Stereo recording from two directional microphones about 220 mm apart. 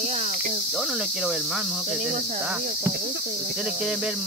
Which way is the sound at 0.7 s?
Centre (ahead or behind).